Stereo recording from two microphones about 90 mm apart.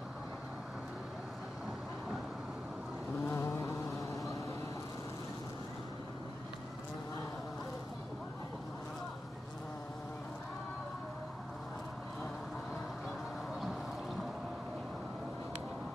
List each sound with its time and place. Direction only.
3.3 s insect: 30° left (ahead or behind)